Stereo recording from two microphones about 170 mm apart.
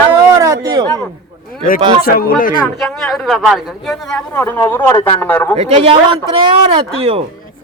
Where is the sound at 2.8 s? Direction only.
Centre (ahead or behind).